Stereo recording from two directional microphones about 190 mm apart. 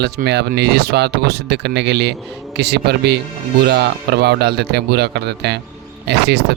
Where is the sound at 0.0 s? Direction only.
60° right (ahead or behind).